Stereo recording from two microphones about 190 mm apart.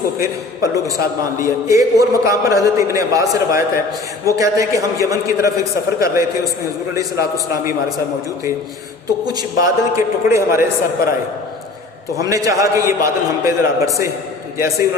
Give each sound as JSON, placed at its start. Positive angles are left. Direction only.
{"t": 0.2, "sound": "a man's voice", "side_deg": -15}
{"t": 7.5, "sound": "a man's voice", "side_deg": -15}
{"t": 9.2, "sound": "a man's voice", "side_deg": -15}
{"t": 12.2, "sound": "a man's voice", "side_deg": -15}